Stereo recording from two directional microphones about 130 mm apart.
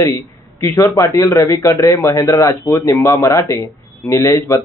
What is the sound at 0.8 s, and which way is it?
Speech, 25° left (ahead or behind).